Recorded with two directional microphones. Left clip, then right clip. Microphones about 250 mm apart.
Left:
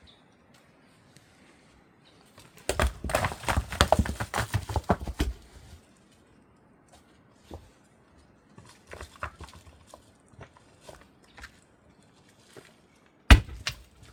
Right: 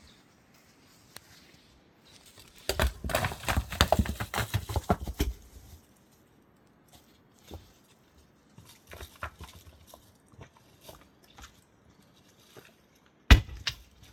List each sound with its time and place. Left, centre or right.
2.6 s clip-clop: centre
8.6 s horse: centre
12.6 s boat: left
13.2 s chop: left